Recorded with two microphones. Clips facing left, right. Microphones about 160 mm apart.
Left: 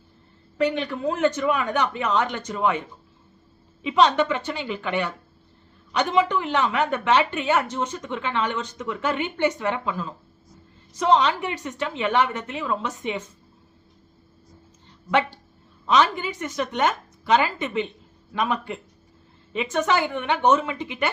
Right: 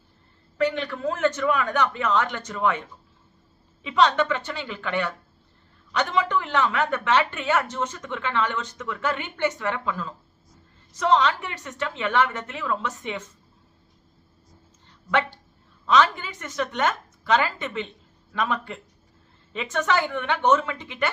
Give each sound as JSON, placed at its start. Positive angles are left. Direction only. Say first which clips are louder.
{"t": 0.6, "sound": "speech", "louder": "left 1 dB", "side_deg": 15}
{"t": 3.8, "sound": "speech", "louder": "left 2 dB", "side_deg": 15}
{"t": 15.9, "sound": "speech", "louder": "even", "side_deg": 15}